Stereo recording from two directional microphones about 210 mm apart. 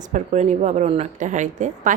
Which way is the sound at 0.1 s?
35° right (ahead or behind).